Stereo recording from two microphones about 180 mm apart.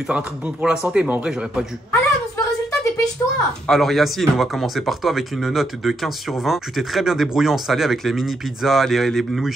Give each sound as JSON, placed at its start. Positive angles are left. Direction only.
{"t": 0.1, "sound": "speech", "side_deg": -5}
{"t": 1.9, "sound": "a sound", "side_deg": 15}
{"t": 3.6, "sound": "speech", "side_deg": 0}